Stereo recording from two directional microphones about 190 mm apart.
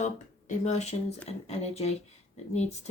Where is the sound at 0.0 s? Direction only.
40° left (ahead or behind).